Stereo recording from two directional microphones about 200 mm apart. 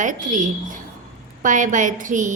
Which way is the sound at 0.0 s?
40° right (ahead or behind).